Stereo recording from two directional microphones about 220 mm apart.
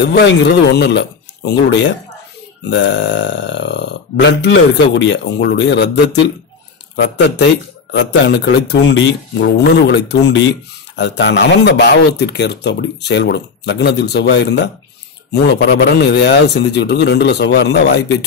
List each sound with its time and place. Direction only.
0.0 s speech: 50° left (ahead or behind)